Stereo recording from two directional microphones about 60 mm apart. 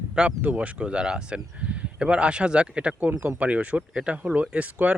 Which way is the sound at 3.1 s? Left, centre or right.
Right.